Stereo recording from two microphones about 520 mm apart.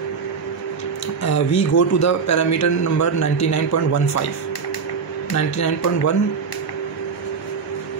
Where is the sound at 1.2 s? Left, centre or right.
Left.